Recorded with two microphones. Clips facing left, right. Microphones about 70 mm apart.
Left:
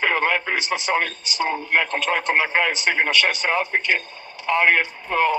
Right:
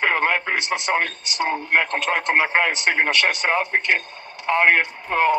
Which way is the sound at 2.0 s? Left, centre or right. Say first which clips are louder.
Right 1 dB; centre.